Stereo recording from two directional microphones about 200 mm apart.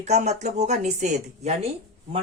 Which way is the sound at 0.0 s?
35° right (ahead or behind).